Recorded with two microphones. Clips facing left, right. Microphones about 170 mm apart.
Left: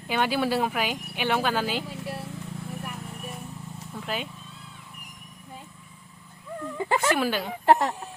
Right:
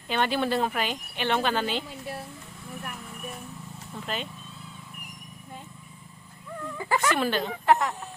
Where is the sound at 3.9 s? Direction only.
5° left (ahead or behind).